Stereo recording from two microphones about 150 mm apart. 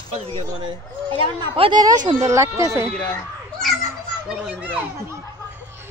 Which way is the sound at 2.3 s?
20° right (ahead or behind).